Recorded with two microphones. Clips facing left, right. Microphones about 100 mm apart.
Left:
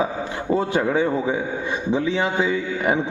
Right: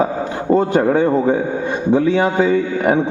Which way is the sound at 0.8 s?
50° right (ahead or behind).